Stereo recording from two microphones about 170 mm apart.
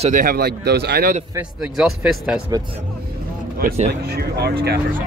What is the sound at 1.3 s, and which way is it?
A man's voice, 5° right (ahead or behind).